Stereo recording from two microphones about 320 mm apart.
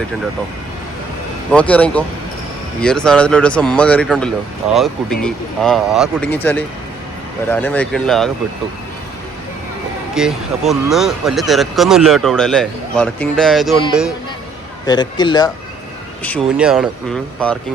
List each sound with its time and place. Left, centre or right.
1.5 s speech: centre
10.2 s speech: centre
14.8 s a man's voice: centre
16.2 s speech: centre